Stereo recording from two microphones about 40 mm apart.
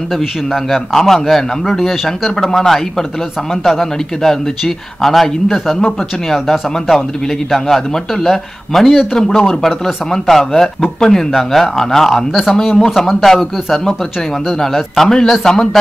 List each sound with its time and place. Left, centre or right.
0.7 s a man's voice: centre
10.1 s a man's voice: centre
14.7 s speech: centre
15.0 s a man's voice: centre